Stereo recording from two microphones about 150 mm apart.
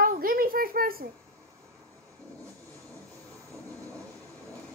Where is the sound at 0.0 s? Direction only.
70° right (ahead or behind).